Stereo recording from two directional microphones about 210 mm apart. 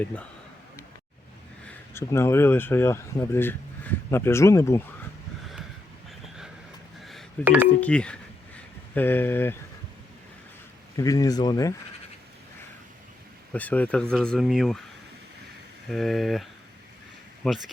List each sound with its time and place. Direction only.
1.9 s speech: 15° left (ahead or behind)
6.1 s vehicle: centre (ahead or behind)
7.0 s telephone dialing: centre (ahead or behind)
7.8 s a sound: 5° left (ahead or behind)
10.9 s speech: 15° left (ahead or behind)
13.5 s speech: 5° left (ahead or behind)
15.9 s speech: centre (ahead or behind)